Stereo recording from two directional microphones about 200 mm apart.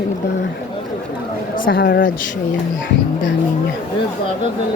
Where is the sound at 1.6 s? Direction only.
55° left (ahead or behind).